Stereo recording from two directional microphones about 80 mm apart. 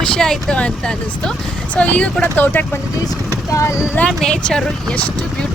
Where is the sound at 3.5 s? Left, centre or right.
Left.